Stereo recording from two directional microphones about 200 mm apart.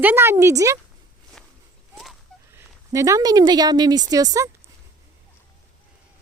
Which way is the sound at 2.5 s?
15° right (ahead or behind).